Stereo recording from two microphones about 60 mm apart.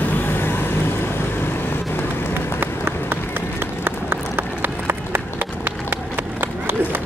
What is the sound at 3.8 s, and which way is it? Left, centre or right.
Run, right.